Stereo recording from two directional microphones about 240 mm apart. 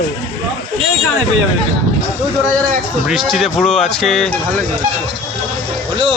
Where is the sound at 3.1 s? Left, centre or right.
Centre.